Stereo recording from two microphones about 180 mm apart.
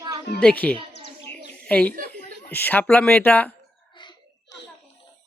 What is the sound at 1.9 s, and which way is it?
Chuckle, 50° right (ahead or behind).